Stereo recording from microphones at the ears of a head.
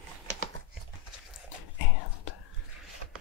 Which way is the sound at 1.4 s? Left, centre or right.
Left.